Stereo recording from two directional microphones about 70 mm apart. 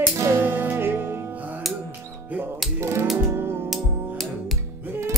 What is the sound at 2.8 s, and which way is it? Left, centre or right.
Music, right.